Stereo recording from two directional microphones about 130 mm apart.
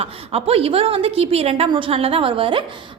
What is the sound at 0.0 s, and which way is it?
A woman's voice, 50° right (ahead or behind).